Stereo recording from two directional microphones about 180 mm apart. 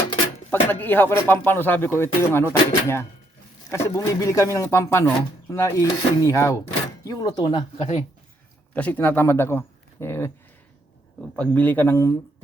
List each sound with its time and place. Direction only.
0.5 s speech: 10° left (ahead or behind)
8.7 s speech: 10° left (ahead or behind)
11.3 s speech: 10° left (ahead or behind)